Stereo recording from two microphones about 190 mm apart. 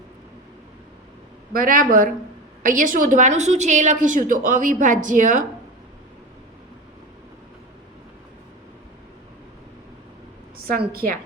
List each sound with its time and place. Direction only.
1.5 s a woman's voice: 45° right (ahead or behind)
10.7 s a woman's voice: 50° right (ahead or behind)